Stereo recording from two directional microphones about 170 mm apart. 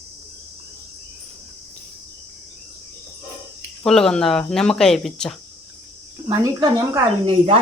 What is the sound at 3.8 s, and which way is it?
Speech, 5° left (ahead or behind).